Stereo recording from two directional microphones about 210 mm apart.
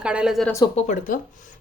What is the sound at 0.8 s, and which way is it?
Speech, 35° left (ahead or behind).